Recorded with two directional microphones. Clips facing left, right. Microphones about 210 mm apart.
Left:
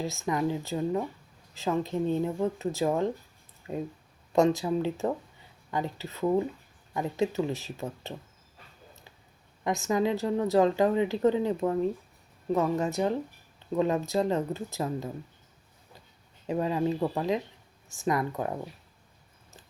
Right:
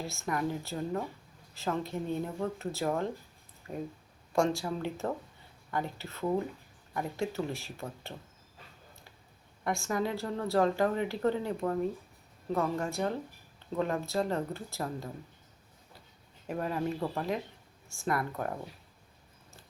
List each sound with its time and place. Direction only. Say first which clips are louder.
0.3 s a woman's voice: left 4 dB; 20° left (ahead or behind)
9.6 s a woman's voice: left 5 dB; 20° left (ahead or behind)
16.5 s a woman's voice: left 5 dB; 20° left (ahead or behind)